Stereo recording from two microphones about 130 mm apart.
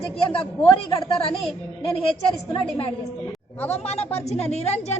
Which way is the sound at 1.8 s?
45° left (ahead or behind).